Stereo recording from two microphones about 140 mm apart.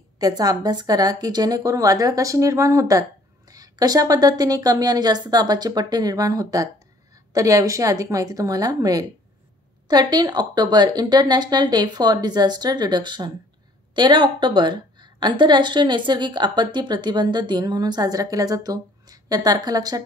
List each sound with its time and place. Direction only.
0.2 s a woman's voice: 25° right (ahead or behind)